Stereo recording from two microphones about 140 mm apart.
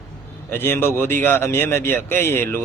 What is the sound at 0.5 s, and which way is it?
A man's voice, 15° left (ahead or behind).